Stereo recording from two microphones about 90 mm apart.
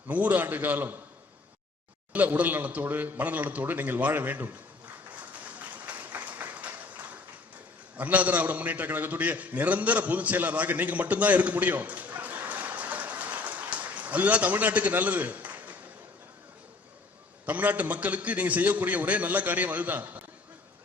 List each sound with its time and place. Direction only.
0.1 s a man's voice: 20° right (ahead or behind)
2.1 s a man's voice: 20° right (ahead or behind)
5.3 s a sound: 15° right (ahead or behind)
7.9 s a man's voice: 15° right (ahead or behind)
17.4 s a man's voice: 15° right (ahead or behind)